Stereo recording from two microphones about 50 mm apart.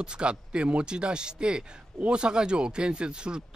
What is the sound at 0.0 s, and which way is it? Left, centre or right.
Speech, centre.